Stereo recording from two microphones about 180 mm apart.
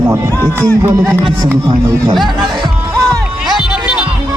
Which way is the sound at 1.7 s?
25° right (ahead or behind).